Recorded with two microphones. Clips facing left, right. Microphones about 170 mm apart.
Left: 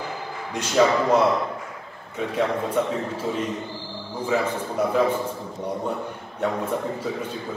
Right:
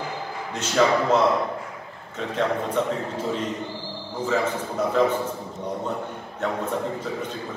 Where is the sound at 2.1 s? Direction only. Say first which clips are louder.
Left 1 dB; 10° left (ahead or behind).